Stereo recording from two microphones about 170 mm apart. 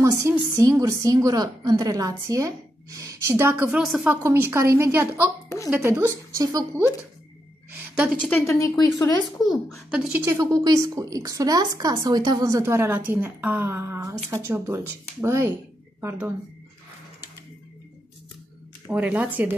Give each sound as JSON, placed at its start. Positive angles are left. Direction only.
{"t": 0.0, "sound": "a woman's voice", "side_deg": -15}
{"t": 7.9, "sound": "a woman's voice", "side_deg": -5}
{"t": 8.3, "sound": "speech", "side_deg": 15}
{"t": 9.8, "sound": "a woman's voice", "side_deg": -5}
{"t": 10.2, "sound": "a woman's voice", "side_deg": -20}
{"t": 18.9, "sound": "speech", "side_deg": -10}